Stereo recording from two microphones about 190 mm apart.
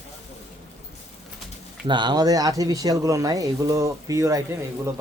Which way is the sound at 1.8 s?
25° right (ahead or behind).